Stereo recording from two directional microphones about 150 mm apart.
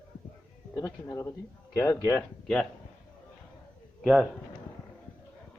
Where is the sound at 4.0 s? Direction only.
Centre (ahead or behind).